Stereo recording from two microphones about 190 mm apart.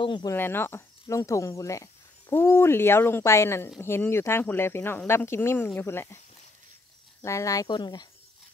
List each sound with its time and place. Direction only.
0.0 s speech: 20° left (ahead or behind)
7.2 s speech: 15° left (ahead or behind)